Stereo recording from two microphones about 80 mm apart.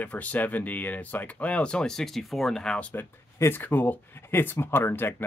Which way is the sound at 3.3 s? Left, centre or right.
Left.